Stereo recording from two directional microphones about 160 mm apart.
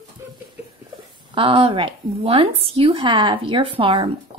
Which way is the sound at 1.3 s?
35° right (ahead or behind).